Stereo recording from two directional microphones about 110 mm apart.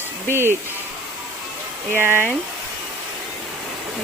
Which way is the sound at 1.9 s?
20° right (ahead or behind).